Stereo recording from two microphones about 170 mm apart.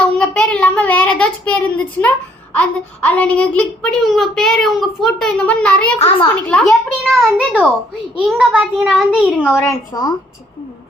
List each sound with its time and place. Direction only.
0.0 s a child's voice: 5° left (ahead or behind)
9.6 s a woman's voice: 20° left (ahead or behind)